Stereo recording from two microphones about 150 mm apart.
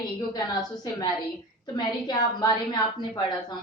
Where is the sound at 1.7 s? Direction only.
25° left (ahead or behind).